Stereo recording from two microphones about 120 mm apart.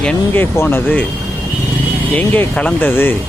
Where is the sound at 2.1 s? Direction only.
10° left (ahead or behind).